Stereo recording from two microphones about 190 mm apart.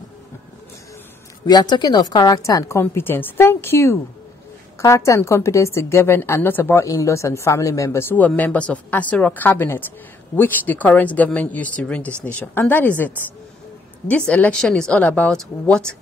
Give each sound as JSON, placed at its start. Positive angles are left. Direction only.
{"t": 1.4, "sound": "a woman's voice", "side_deg": 20}